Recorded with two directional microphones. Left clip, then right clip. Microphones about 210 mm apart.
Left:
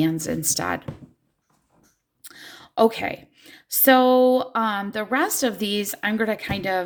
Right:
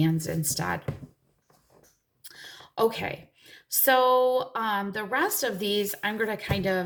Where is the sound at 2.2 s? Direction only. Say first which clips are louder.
Left 3 dB; 45° left (ahead or behind).